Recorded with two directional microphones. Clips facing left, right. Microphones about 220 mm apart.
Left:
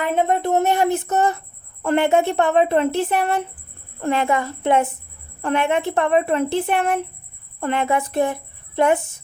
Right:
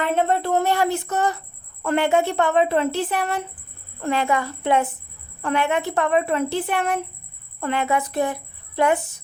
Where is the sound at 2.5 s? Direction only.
50° left (ahead or behind).